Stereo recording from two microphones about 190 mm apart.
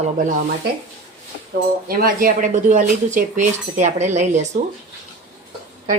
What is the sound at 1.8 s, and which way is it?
A woman's voice, 50° right (ahead or behind).